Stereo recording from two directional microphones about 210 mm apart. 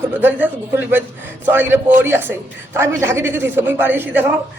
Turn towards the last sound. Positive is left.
turn(degrees=-10)  # may be behind; listen again after turning